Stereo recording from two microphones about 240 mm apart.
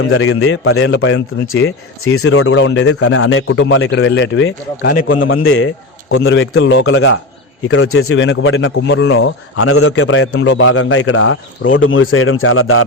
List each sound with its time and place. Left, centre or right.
0.0 s speech: left
2.9 s a man's voice: left
5.0 s speech: left